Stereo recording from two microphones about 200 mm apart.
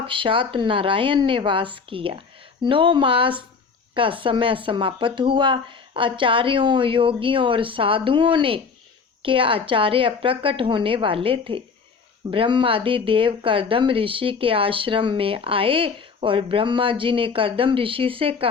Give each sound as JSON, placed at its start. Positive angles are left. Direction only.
{"t": 0.0, "sound": "speech", "side_deg": -25}